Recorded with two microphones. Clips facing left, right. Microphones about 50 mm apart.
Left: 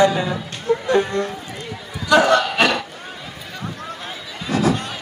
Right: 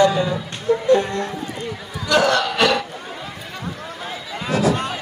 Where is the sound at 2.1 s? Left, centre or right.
Centre.